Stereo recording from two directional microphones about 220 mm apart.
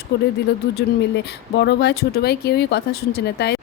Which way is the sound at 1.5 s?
50° left (ahead or behind).